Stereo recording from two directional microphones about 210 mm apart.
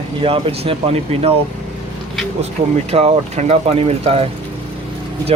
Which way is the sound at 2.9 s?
30° right (ahead or behind).